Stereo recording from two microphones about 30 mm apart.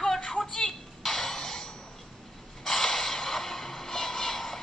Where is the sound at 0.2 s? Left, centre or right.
Centre.